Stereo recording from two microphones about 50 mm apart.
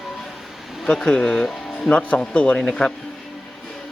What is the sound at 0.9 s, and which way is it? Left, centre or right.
Speech, centre.